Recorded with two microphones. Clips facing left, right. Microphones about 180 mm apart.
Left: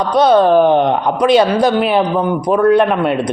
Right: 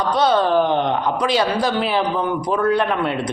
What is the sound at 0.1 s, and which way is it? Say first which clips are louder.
A man's voice: left 7 dB; 20° left (ahead or behind).